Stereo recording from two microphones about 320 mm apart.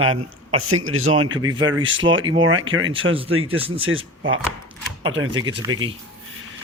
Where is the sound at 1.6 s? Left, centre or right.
Right.